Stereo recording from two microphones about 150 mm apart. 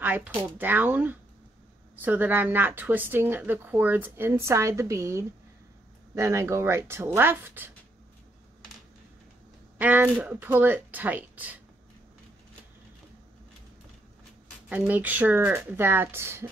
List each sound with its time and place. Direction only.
0.0 s a woman's voice: 10° right (ahead or behind)
9.8 s a woman's voice: 10° right (ahead or behind)
14.7 s a woman's voice: 10° right (ahead or behind)